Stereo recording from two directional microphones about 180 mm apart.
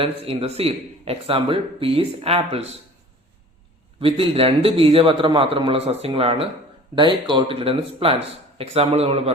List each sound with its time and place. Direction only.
0.0 s a man's voice: 30° right (ahead or behind)
4.0 s a man's voice: 30° right (ahead or behind)